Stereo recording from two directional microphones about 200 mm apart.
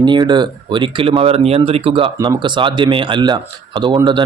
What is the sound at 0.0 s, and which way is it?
Speech, 20° right (ahead or behind).